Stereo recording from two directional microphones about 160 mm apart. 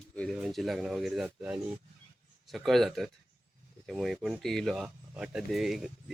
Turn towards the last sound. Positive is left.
turn(degrees=0)  # may be behind; listen again after turning